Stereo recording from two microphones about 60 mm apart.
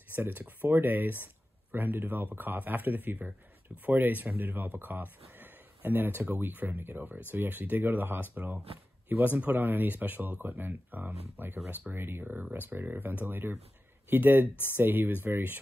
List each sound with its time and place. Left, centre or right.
0.1 s speech: right
14.5 s speech: left
14.8 s speech: right